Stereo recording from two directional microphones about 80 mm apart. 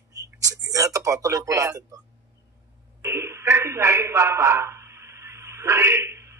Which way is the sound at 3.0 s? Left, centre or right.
Right.